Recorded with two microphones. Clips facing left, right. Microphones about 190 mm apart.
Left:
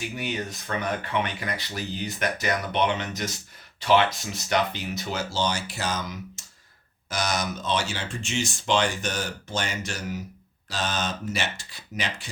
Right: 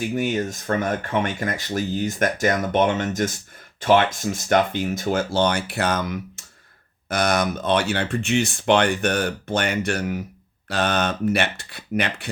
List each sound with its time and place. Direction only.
0.0 s speech: 45° right (ahead or behind)